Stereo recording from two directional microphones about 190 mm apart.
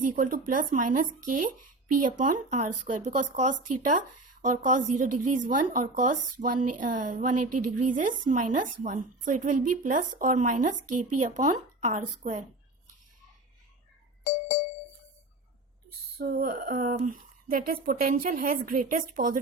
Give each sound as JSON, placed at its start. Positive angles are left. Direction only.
{"t": 0.0, "sound": "a woman's voice", "side_deg": -45}
{"t": 16.1, "sound": "a woman's voice", "side_deg": -55}